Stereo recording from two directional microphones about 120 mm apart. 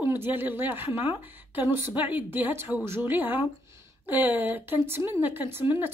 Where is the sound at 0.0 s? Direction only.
15° right (ahead or behind).